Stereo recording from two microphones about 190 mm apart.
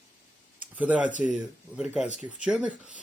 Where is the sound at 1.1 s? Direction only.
40° left (ahead or behind).